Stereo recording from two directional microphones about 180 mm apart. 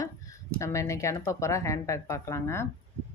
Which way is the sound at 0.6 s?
15° left (ahead or behind).